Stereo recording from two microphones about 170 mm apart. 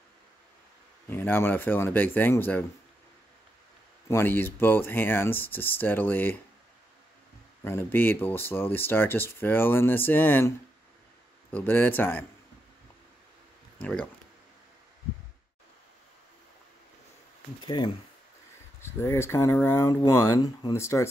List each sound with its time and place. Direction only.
1.0 s speech: 10° left (ahead or behind)
4.1 s speech: 10° left (ahead or behind)
7.6 s speech: 15° left (ahead or behind)
11.5 s speech: 10° left (ahead or behind)
13.7 s speech: 5° left (ahead or behind)
17.6 s speech: 25° left (ahead or behind)
18.8 s speech: 15° left (ahead or behind)